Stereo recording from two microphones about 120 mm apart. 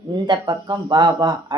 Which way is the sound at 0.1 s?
35° right (ahead or behind).